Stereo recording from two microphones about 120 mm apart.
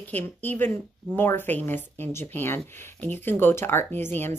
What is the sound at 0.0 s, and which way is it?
Speech, 15° left (ahead or behind).